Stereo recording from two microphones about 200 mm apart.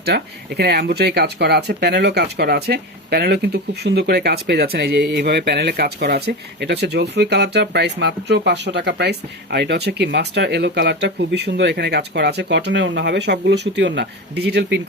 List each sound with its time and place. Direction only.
0.0 s speech: 55° right (ahead or behind)